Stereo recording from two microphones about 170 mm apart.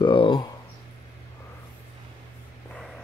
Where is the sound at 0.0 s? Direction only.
30° left (ahead or behind).